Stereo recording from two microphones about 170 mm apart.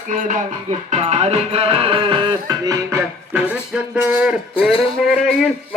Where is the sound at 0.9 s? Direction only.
40° right (ahead or behind).